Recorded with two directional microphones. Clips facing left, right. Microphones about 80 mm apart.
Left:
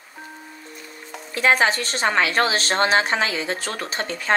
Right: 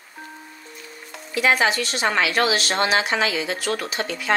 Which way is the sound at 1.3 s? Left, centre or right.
Left.